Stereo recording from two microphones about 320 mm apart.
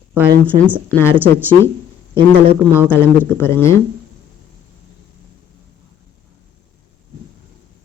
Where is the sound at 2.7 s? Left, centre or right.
Centre.